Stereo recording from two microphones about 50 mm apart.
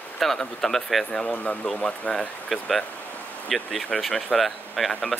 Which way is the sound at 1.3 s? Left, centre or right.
Left.